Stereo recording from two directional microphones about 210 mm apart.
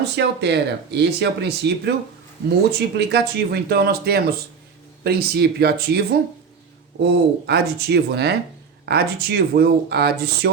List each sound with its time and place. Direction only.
0.2 s speech: 55° right (ahead or behind)
7.0 s speech: 50° right (ahead or behind)